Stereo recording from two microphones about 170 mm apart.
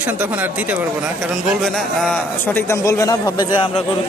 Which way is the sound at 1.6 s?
5° left (ahead or behind).